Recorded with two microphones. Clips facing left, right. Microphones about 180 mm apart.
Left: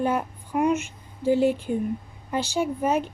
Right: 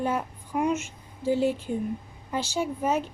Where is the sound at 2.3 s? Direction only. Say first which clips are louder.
Left 3 dB; 60° left (ahead or behind).